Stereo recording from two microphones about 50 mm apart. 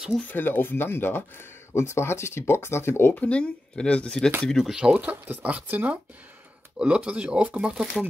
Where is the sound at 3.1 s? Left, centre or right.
Left.